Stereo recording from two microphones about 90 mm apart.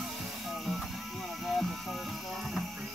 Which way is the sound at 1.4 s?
Centre (ahead or behind).